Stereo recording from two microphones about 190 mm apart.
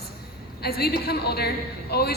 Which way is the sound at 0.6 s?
55° left (ahead or behind).